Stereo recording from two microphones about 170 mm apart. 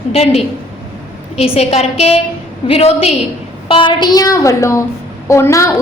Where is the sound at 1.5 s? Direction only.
40° left (ahead or behind).